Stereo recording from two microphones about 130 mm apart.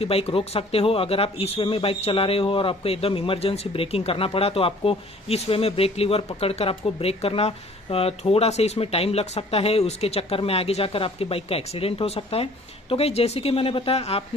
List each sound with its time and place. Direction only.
0.0 s speech: 50° left (ahead or behind)